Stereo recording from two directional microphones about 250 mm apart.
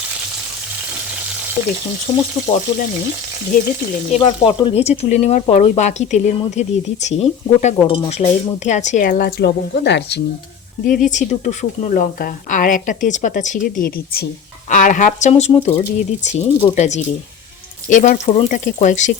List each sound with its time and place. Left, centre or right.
1.6 s speech: left
3.5 s speech: left
10.8 s speech: left